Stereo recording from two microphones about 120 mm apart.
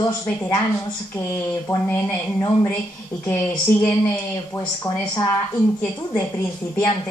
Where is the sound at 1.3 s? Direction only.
25° left (ahead or behind).